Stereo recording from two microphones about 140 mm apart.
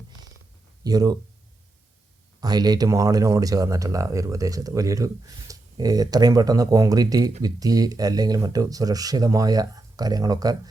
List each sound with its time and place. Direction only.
0.9 s speech: 25° right (ahead or behind)
2.4 s speech: 30° right (ahead or behind)